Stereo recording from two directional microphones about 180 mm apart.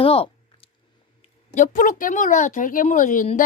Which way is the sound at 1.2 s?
45° left (ahead or behind).